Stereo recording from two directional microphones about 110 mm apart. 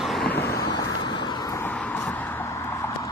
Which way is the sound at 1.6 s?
15° left (ahead or behind).